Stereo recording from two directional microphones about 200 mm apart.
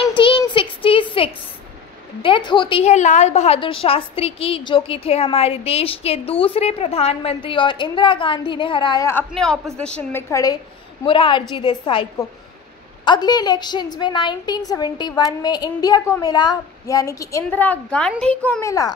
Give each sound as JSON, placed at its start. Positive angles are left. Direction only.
{"t": 0.1, "sound": "a sound", "side_deg": 25}
{"t": 2.2, "sound": "a woman's voice", "side_deg": 25}
{"t": 9.3, "sound": "a woman's voice", "side_deg": 0}